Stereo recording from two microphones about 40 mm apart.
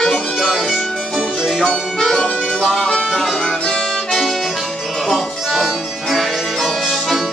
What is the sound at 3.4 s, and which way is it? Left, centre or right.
Music, centre.